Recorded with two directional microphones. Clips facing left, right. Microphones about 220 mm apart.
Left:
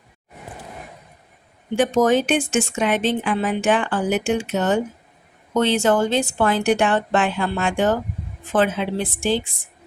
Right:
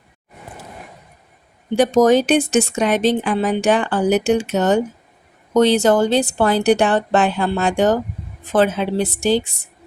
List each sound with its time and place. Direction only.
1.7 s speech: 40° right (ahead or behind)